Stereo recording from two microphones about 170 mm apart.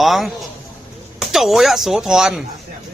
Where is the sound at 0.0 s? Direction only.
Centre (ahead or behind).